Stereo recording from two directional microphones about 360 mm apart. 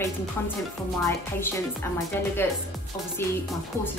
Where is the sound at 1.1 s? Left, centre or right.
Centre.